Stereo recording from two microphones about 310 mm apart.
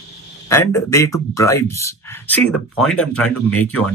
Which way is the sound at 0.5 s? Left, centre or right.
Centre.